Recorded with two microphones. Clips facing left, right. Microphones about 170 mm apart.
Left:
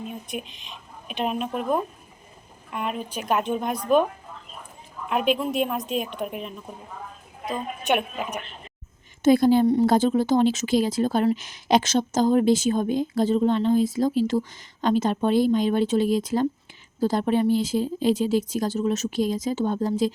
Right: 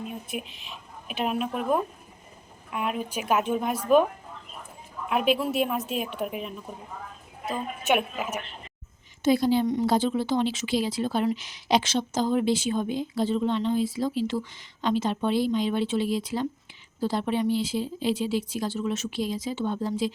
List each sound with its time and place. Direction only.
0.1 s a woman's voice: 5° right (ahead or behind)
5.0 s a woman's voice: 5° right (ahead or behind)
7.5 s a woman's voice: 5° right (ahead or behind)
9.2 s a woman's voice: 50° left (ahead or behind)